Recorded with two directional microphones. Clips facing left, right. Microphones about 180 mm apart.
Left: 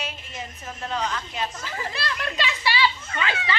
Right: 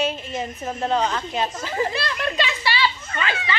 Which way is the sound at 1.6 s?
20° right (ahead or behind).